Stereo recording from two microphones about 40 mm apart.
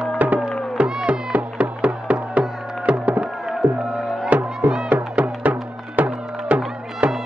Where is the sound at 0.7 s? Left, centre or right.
Centre.